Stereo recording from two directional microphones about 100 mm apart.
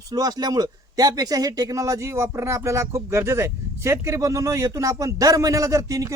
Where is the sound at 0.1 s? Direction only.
40° right (ahead or behind).